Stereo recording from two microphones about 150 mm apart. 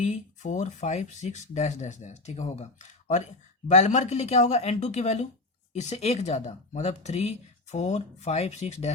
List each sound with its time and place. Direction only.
0.0 s speech: 55° left (ahead or behind)
3.7 s speech: 50° left (ahead or behind)